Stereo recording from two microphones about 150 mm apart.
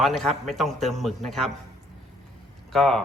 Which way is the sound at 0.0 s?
Centre (ahead or behind).